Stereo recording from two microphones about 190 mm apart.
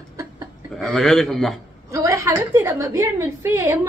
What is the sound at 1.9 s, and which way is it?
A woman's voice, 15° right (ahead or behind).